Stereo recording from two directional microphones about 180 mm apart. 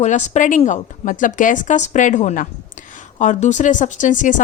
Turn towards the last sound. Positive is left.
turn(degrees=45)  # may be behind; listen again after turning